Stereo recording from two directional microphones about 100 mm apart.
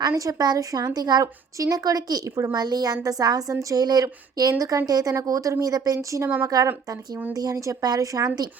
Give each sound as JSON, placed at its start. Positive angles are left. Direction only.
{"t": 0.0, "sound": "a woman's voice", "side_deg": -40}